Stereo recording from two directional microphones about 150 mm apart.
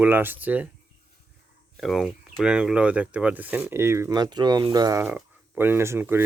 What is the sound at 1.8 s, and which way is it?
Speech, centre (ahead or behind).